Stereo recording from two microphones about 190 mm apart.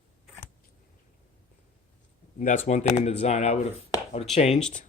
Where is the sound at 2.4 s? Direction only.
40° left (ahead or behind).